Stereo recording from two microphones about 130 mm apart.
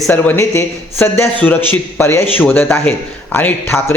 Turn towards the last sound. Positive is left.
turn(degrees=20)  # may be behind; listen again after turning